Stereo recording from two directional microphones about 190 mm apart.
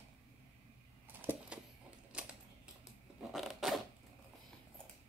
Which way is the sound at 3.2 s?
Centre (ahead or behind).